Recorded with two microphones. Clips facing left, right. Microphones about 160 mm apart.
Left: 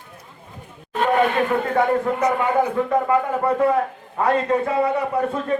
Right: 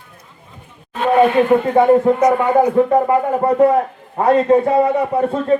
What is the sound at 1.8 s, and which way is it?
A man's voice, 25° right (ahead or behind).